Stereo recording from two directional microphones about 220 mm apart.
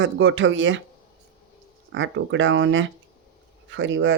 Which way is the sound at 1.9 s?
60° right (ahead or behind).